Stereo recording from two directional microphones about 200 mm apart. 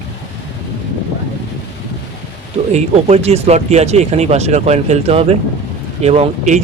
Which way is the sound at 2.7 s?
35° right (ahead or behind).